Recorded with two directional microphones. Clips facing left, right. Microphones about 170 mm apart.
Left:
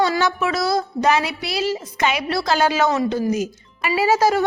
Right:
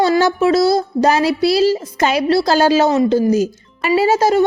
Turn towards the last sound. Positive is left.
turn(degrees=-25)  # may be behind; listen again after turning